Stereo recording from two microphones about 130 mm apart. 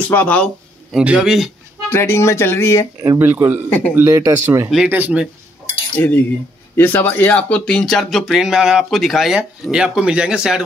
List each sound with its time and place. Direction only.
0.1 s a man's voice: 10° left (ahead or behind)
0.9 s speech: 5° right (ahead or behind)
1.9 s speech: 20° left (ahead or behind)
3.0 s speech: 20° right (ahead or behind)
5.9 s a man's voice: 10° left (ahead or behind); by 10.6 s 5° right (ahead or behind)